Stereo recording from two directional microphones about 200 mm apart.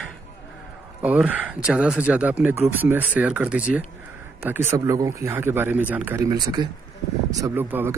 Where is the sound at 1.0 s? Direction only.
10° right (ahead or behind).